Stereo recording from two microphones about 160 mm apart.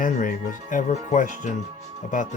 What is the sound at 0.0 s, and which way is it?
Speech, 55° left (ahead or behind).